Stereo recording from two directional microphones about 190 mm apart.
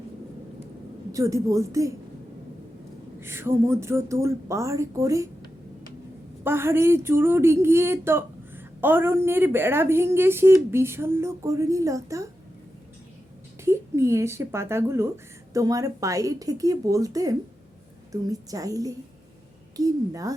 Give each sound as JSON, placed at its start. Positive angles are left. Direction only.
{"t": 1.1, "sound": "speech", "side_deg": -15}
{"t": 3.2, "sound": "speech", "side_deg": -10}
{"t": 6.4, "sound": "speech", "side_deg": -10}
{"t": 13.7, "sound": "a woman's voice", "side_deg": -15}